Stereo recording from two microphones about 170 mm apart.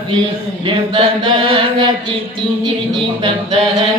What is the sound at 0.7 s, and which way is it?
Chant, 30° right (ahead or behind).